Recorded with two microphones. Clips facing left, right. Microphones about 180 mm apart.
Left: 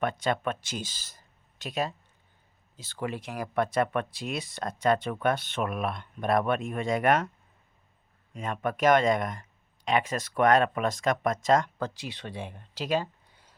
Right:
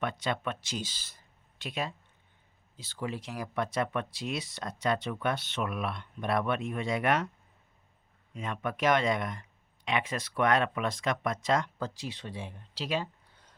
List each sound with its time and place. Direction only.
0.0 s speech: 50° left (ahead or behind)
8.4 s speech: 45° left (ahead or behind)
11.8 s speech: 65° left (ahead or behind); by 13.1 s 45° left (ahead or behind)
13.3 s a sound: 10° left (ahead or behind)